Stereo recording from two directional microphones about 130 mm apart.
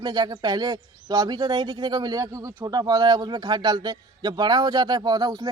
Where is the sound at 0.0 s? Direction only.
30° right (ahead or behind).